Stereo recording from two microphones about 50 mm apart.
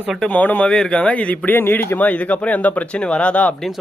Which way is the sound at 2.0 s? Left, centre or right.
Left.